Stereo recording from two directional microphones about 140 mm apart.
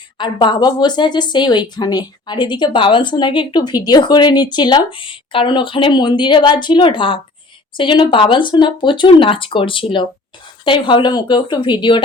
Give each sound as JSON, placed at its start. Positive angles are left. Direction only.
{"t": 0.2, "sound": "speech", "side_deg": 35}